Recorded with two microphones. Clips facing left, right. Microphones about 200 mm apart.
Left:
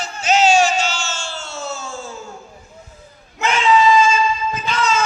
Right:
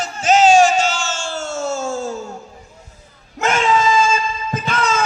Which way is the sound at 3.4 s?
45° right (ahead or behind).